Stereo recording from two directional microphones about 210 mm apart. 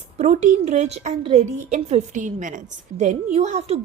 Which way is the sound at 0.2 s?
35° right (ahead or behind).